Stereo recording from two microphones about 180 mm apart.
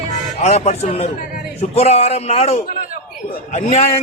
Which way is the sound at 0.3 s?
35° left (ahead or behind).